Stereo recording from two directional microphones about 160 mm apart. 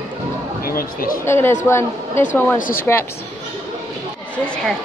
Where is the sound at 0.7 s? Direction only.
65° left (ahead or behind).